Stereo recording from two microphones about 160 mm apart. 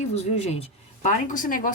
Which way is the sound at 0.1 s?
40° left (ahead or behind).